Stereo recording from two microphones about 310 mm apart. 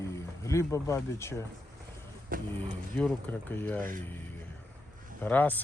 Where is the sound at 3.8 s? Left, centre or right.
Right.